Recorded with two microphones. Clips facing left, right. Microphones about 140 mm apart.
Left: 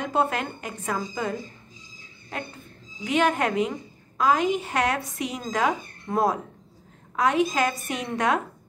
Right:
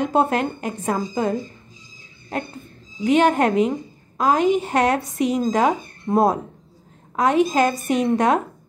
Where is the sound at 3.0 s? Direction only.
25° right (ahead or behind).